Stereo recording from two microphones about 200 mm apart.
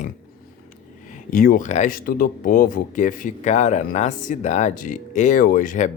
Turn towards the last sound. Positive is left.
turn(degrees=40)  # may be behind; listen again after turning